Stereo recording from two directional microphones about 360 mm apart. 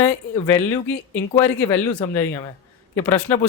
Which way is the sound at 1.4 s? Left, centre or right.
Centre.